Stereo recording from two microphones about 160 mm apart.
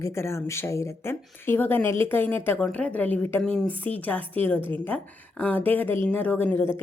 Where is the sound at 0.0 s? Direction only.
15° left (ahead or behind).